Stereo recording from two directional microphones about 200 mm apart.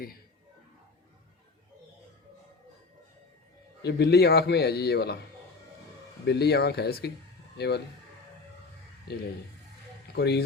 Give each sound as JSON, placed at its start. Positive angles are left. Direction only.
{"t": 3.8, "sound": "a man's voice", "side_deg": 55}
{"t": 6.2, "sound": "a man's voice", "side_deg": 55}
{"t": 9.1, "sound": "speech", "side_deg": 55}